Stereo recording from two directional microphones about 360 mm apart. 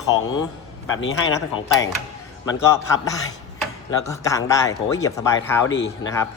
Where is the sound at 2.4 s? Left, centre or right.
Centre.